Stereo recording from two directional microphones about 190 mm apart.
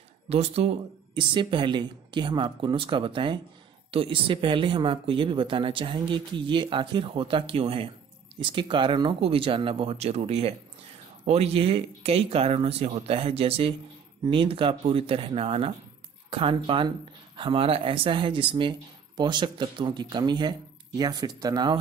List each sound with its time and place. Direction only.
0.3 s speech: 30° right (ahead or behind)